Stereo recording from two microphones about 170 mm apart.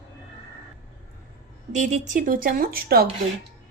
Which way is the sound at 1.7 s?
45° right (ahead or behind).